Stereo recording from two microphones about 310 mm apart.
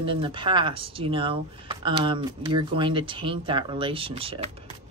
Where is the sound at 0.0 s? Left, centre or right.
Centre.